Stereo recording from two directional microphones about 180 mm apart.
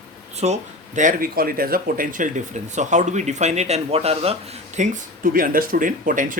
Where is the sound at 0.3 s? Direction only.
40° right (ahead or behind).